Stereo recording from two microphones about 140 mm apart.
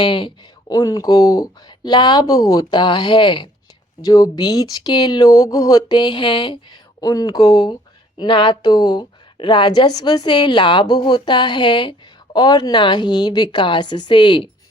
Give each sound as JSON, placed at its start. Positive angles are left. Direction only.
{"t": 0.0, "sound": "speech", "side_deg": 35}